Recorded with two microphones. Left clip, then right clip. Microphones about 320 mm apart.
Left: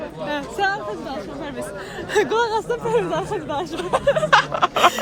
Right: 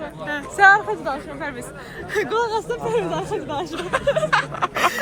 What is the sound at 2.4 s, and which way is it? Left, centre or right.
Speech, centre.